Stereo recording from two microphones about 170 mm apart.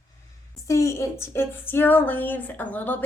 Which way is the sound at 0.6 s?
15° left (ahead or behind).